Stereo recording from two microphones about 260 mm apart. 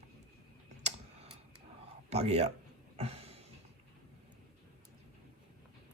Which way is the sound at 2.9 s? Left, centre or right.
Right.